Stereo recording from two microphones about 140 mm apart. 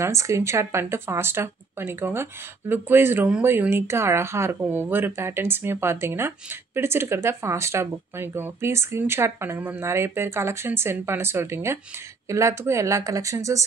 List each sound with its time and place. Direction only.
0.0 s speech: 20° right (ahead or behind)